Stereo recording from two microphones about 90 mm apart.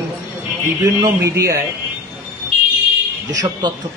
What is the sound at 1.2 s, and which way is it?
Speech, 35° right (ahead or behind).